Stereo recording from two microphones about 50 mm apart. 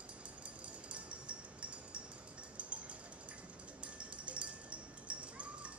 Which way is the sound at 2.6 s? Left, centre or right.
Right.